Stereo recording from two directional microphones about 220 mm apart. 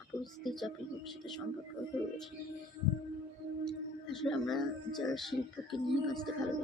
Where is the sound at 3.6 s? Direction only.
Centre (ahead or behind).